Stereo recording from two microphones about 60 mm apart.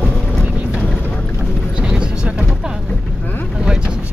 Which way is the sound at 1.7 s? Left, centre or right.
Centre.